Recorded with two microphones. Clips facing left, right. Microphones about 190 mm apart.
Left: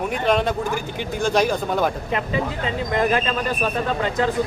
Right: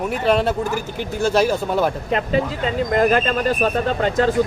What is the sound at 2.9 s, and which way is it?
Speech, 45° right (ahead or behind).